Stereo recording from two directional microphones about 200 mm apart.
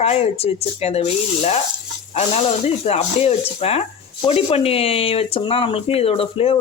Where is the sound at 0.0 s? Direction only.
30° left (ahead or behind).